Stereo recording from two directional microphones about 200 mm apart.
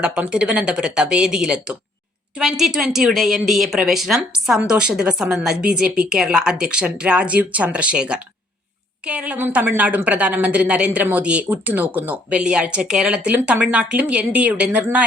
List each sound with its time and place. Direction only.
0.0 s a woman's voice: 5° right (ahead or behind)